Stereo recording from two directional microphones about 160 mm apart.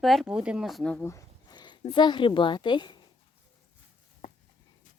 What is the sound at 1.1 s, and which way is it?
Speech, 25° left (ahead or behind).